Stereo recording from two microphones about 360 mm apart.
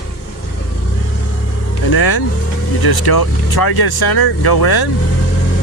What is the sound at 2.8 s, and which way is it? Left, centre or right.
Speech, left.